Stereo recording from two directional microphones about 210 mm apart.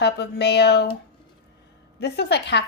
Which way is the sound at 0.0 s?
55° left (ahead or behind).